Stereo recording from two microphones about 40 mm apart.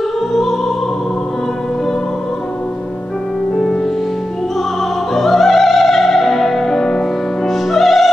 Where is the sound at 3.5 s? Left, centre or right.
Centre.